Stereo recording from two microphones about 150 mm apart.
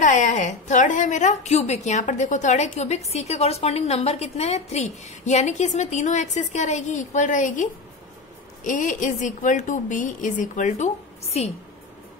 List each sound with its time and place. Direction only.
0.0 s a woman's voice: 60° left (ahead or behind)